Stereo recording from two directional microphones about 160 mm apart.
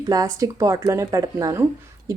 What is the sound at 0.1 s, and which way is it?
A woman's voice, 20° right (ahead or behind).